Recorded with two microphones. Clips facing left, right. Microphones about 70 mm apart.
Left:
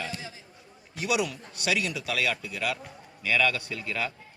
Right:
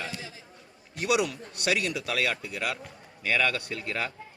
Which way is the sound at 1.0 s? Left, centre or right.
Right.